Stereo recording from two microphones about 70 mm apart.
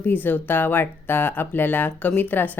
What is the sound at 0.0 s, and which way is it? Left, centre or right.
Speech, left.